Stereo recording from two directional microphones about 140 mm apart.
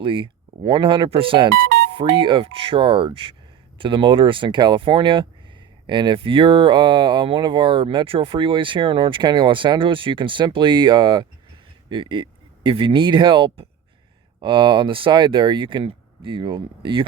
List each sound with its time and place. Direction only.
0.0 s speech: 35° right (ahead or behind)